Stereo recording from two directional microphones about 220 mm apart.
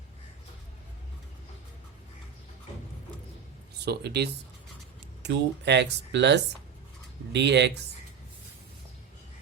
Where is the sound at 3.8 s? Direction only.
50° right (ahead or behind).